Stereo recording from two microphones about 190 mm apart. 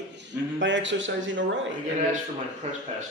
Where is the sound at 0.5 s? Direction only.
75° right (ahead or behind).